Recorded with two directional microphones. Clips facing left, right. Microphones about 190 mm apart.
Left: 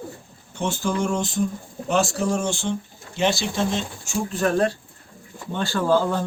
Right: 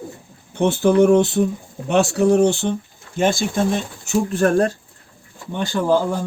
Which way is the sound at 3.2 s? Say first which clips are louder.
Right 4 dB; 50° right (ahead or behind).